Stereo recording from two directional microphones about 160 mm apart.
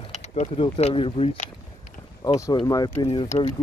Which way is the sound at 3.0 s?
40° left (ahead or behind).